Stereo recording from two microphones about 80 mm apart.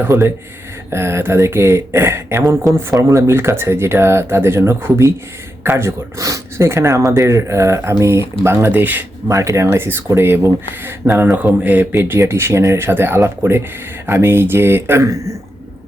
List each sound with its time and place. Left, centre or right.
0.0 s speech: right
8.4 s speech: right
9.2 s speech: right
9.7 s speech: right